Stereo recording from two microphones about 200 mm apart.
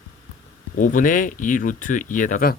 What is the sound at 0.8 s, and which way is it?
Speech, 40° left (ahead or behind).